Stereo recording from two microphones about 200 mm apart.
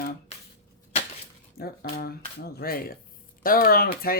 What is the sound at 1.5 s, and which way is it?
Speech, 50° left (ahead or behind).